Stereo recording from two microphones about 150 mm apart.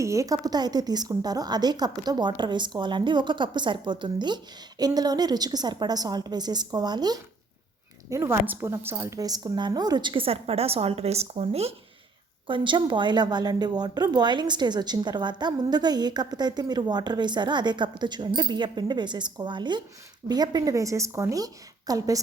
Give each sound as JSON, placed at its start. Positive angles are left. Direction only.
{"t": 0.0, "sound": "a woman's voice", "side_deg": -20}
{"t": 12.5, "sound": "a woman's voice", "side_deg": -35}